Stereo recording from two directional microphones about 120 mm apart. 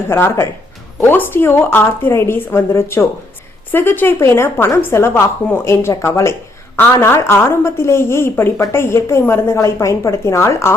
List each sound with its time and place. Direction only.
0.1 s a woman's voice: 20° left (ahead or behind)